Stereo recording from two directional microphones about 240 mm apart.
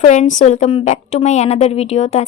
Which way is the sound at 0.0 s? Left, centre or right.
Left.